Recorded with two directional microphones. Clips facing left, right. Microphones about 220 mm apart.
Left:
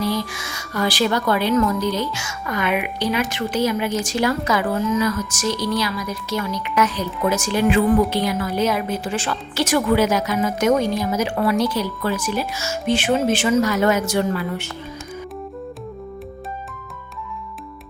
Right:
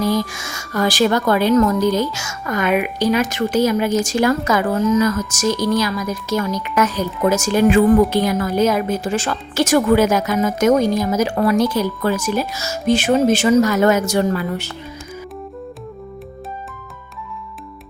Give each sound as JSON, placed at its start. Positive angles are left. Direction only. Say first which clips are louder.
{"t": 0.0, "sound": "a woman's voice", "louder": "right 4 dB", "side_deg": -45}